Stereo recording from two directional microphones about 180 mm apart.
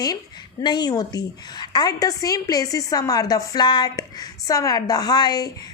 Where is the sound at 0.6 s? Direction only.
25° left (ahead or behind).